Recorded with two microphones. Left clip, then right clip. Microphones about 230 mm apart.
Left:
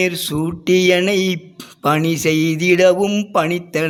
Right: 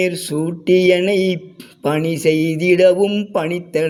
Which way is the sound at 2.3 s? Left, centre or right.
Left.